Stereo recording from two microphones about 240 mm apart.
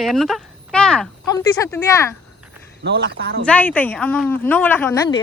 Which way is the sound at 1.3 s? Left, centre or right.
Centre.